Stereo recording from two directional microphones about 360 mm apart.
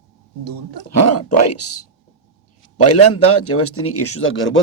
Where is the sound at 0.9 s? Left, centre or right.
Left.